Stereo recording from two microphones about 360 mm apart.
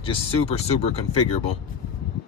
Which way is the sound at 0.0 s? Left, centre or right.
Centre.